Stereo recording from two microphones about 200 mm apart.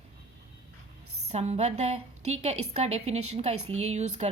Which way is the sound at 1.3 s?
35° right (ahead or behind).